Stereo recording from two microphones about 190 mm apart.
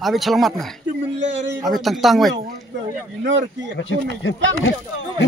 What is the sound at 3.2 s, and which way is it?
Speech, 75° right (ahead or behind).